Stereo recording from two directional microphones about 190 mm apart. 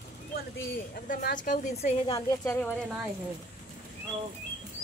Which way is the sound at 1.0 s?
45° left (ahead or behind).